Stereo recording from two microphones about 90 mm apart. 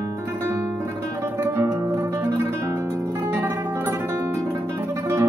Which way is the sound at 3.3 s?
25° right (ahead or behind).